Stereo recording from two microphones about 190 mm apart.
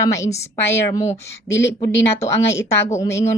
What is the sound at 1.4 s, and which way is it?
Speech, 70° left (ahead or behind).